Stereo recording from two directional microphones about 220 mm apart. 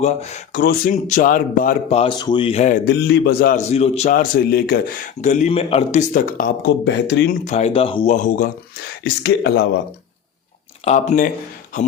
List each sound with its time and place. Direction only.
0.0 s speech: 30° left (ahead or behind)
2.8 s a man's voice: 45° left (ahead or behind)
3.7 s speech: 30° left (ahead or behind); by 7.3 s 55° left (ahead or behind)
7.3 s speech: 30° left (ahead or behind)
8.1 s speech: 35° left (ahead or behind)
9.2 s a man's voice: 50° left (ahead or behind)
10.8 s speech: 35° left (ahead or behind)